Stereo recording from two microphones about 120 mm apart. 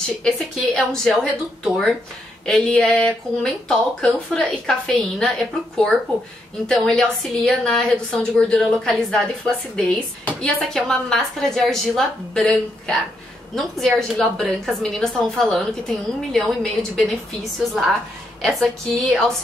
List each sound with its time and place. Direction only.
0.2 s a woman's voice: 5° left (ahead or behind)
6.7 s a woman's voice: 5° left (ahead or behind)